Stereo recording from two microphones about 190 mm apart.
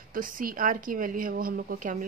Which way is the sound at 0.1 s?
45° right (ahead or behind).